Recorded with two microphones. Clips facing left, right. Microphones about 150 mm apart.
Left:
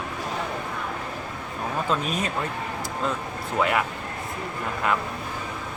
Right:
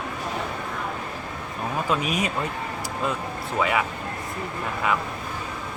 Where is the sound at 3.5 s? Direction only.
Centre (ahead or behind).